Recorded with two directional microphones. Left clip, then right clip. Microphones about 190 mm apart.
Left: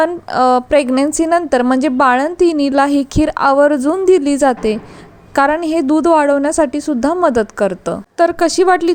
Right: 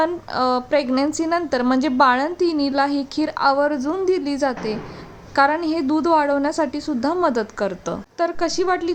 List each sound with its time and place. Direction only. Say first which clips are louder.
0.0 s a woman's voice: left 7 dB; 30° left (ahead or behind)
8.2 s a woman's voice: left 9 dB; 40° left (ahead or behind)